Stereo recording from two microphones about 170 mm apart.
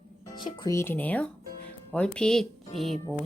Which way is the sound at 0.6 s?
15° left (ahead or behind).